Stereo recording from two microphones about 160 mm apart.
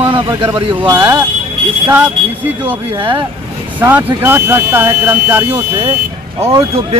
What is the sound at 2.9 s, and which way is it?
Speech, 30° right (ahead or behind).